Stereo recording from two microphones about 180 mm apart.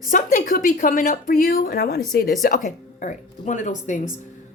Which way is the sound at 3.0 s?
45° left (ahead or behind).